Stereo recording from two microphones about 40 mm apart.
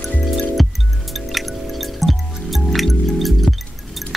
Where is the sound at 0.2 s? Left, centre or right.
Centre.